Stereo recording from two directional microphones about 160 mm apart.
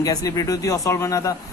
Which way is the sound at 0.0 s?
20° left (ahead or behind).